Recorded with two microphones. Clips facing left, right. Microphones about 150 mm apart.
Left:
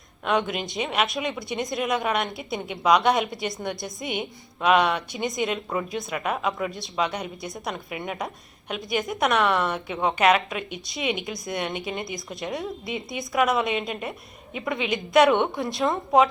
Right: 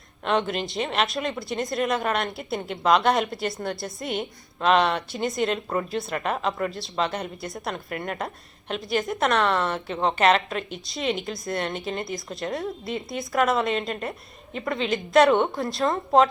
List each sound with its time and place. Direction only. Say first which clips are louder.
0.3 s speech: even; 5° left (ahead or behind)
14.8 s a woman's voice: right 2 dB; 15° left (ahead or behind)
15.1 s speech: even; centre (ahead or behind)